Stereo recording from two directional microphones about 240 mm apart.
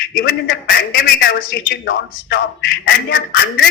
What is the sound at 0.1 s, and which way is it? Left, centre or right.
A man's voice, left.